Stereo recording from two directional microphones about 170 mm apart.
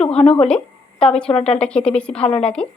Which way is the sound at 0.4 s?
5° left (ahead or behind).